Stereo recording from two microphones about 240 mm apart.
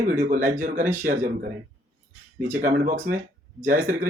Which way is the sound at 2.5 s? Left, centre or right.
Right.